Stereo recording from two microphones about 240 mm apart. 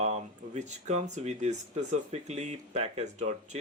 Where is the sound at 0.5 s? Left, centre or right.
Right.